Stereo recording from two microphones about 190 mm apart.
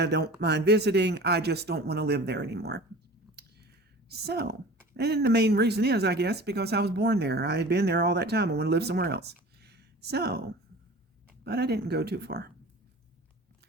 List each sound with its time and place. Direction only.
0.0 s speech: 60° right (ahead or behind)
4.1 s speech: 60° right (ahead or behind)